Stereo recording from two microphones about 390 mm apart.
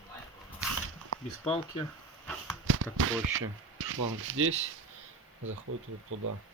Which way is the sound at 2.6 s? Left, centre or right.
Right.